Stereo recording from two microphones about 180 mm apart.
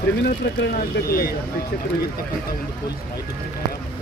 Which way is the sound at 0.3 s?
60° left (ahead or behind).